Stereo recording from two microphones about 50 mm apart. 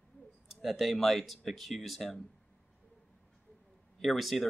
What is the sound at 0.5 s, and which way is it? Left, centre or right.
Speech, centre.